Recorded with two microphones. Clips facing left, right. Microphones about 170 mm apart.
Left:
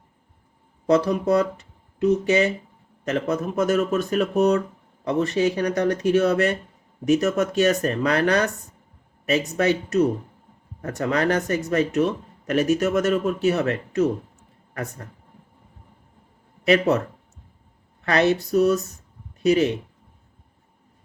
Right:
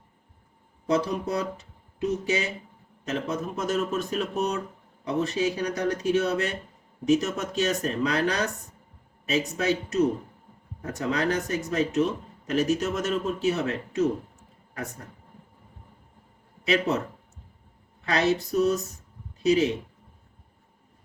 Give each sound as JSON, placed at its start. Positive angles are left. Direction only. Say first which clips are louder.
{"t": 0.9, "sound": "speech", "louder": "left 7 dB", "side_deg": 70}
{"t": 16.6, "sound": "speech", "louder": "left 6 dB", "side_deg": 65}
{"t": 18.0, "sound": "speech", "louder": "left 4 dB", "side_deg": 65}